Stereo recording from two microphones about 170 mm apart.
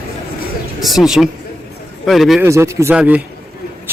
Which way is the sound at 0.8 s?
Centre (ahead or behind).